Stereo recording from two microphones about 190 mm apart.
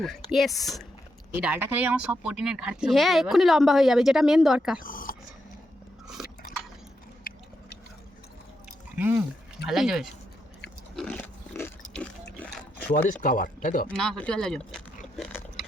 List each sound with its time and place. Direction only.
0.0 s speech: centre (ahead or behind)
1.3 s speech: 10° right (ahead or behind)
4.8 s speech: 45° left (ahead or behind)
9.0 s speech: 10° right (ahead or behind)
10.9 s pig: 5° left (ahead or behind)
13.2 s speech: 45° left (ahead or behind)
13.8 s speech: 5° left (ahead or behind)